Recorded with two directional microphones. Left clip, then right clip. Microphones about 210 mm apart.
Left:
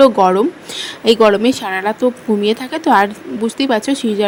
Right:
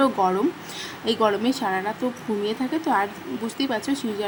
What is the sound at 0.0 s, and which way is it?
Speech, 25° left (ahead or behind).